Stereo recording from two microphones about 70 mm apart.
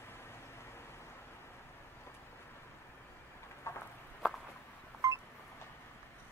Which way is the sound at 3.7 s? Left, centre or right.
Left.